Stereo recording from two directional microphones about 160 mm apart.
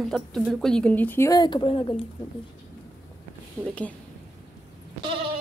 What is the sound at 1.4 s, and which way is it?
Speech, 30° left (ahead or behind).